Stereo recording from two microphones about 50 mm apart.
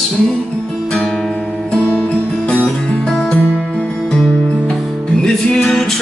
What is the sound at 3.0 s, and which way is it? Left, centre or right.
Music, centre.